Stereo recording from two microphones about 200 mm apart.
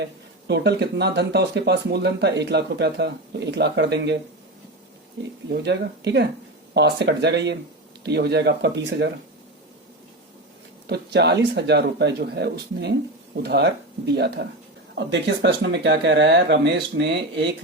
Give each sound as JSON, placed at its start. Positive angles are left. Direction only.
{"t": 0.0, "sound": "speech", "side_deg": -55}
{"t": 5.5, "sound": "speech", "side_deg": -55}
{"t": 10.8, "sound": "speech", "side_deg": -55}